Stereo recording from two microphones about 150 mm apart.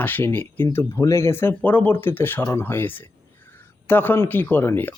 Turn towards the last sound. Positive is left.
turn(degrees=15)  # may be behind; listen again after turning